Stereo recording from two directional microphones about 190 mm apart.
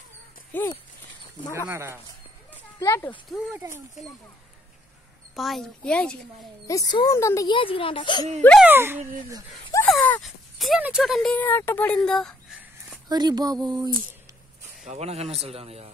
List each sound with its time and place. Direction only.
0.5 s speech: 10° left (ahead or behind)
1.7 s speech: 15° right (ahead or behind)
2.8 s a child's voice: 15° left (ahead or behind)
5.3 s speech: centre (ahead or behind)
6.7 s speech: 20° left (ahead or behind)
8.4 s speech: 5° left (ahead or behind)
8.6 s speech: 10° right (ahead or behind)
9.8 s speech: 5° left (ahead or behind)
13.1 s speech: 20° right (ahead or behind)
14.9 s a man's voice: 35° right (ahead or behind)